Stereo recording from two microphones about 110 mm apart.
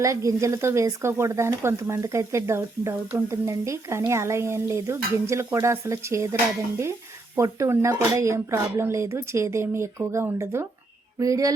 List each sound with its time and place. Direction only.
0.0 s speech: 30° right (ahead or behind)
7.3 s speech: 25° right (ahead or behind)
11.2 s a sound: 30° right (ahead or behind)